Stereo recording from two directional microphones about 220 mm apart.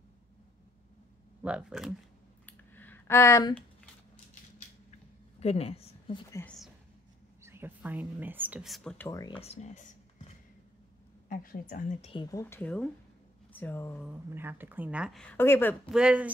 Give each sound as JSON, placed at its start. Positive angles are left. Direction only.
{"t": 1.4, "sound": "speech", "side_deg": -5}
{"t": 2.4, "sound": "a sound", "side_deg": 10}
{"t": 5.4, "sound": "a woman's voice", "side_deg": 25}
{"t": 6.3, "sound": "speech", "side_deg": 5}
{"t": 7.4, "sound": "speech", "side_deg": -10}
{"t": 14.0, "sound": "speech", "side_deg": -10}
{"t": 15.9, "sound": "speech", "side_deg": -5}